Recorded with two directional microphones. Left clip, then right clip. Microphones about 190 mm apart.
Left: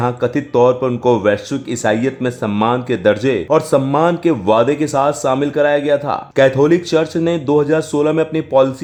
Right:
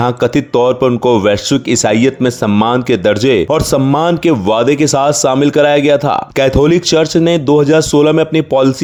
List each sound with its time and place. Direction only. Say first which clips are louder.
0.0 s speech: right 5 dB; 35° right (ahead or behind)